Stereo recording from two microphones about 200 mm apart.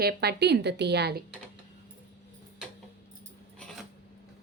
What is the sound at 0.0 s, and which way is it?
A woman's voice, 55° right (ahead or behind).